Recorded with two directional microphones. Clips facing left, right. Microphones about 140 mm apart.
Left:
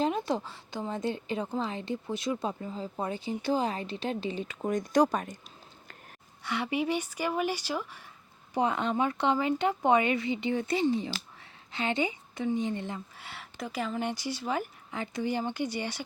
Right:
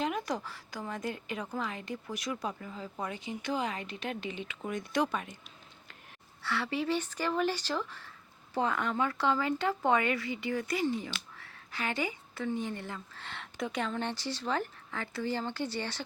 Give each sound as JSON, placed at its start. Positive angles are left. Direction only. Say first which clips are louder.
{"t": 0.0, "sound": "a woman's voice", "louder": "left 4 dB", "side_deg": 25}
{"t": 6.4, "sound": "a woman's voice", "louder": "left 3 dB", "side_deg": 15}
{"t": 13.2, "sound": "speech", "louder": "right 7 dB", "side_deg": 5}